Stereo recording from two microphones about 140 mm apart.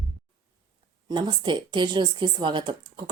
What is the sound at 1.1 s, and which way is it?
A woman's voice, 30° right (ahead or behind).